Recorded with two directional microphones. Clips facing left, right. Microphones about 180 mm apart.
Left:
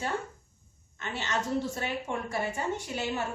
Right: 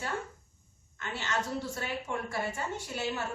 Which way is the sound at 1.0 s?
20° left (ahead or behind).